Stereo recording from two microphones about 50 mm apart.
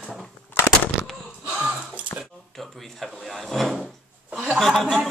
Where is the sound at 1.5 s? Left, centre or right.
Centre.